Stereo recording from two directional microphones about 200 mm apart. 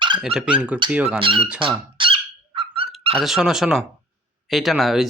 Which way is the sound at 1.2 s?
25° right (ahead or behind).